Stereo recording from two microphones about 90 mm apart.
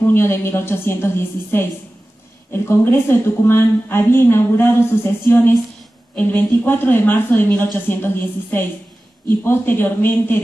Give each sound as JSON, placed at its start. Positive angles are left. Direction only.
{"t": 0.1, "sound": "a woman's voice", "side_deg": 25}